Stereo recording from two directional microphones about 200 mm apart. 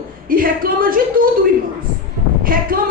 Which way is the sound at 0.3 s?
45° right (ahead or behind).